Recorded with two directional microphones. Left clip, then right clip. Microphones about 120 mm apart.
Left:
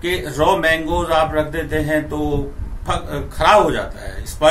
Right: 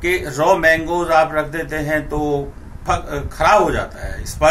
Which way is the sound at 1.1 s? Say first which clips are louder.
Right 2 dB; 20° right (ahead or behind).